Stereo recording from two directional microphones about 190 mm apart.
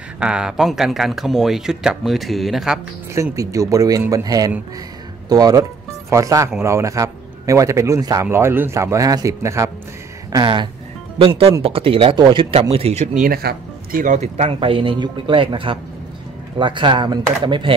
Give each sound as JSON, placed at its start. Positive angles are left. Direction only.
{"t": 0.2, "sound": "speech", "side_deg": -5}
{"t": 3.2, "sound": "a man's voice", "side_deg": -15}